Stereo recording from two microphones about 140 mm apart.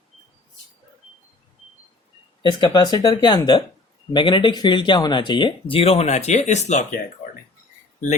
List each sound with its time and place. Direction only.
2.4 s speech: 35° left (ahead or behind); by 7.0 s 60° left (ahead or behind)